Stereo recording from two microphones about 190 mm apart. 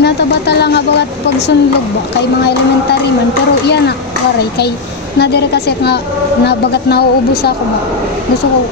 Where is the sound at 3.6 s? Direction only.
60° left (ahead or behind).